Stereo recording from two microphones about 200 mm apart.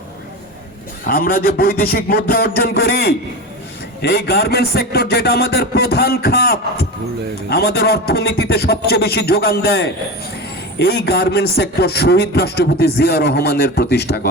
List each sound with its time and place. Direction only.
1.0 s a man's voice: 45° left (ahead or behind)